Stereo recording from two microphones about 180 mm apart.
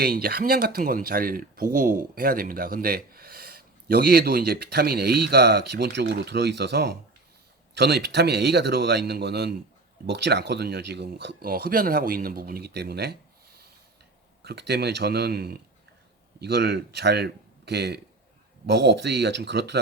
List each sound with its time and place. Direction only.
0.0 s a man's voice: 60° right (ahead or behind)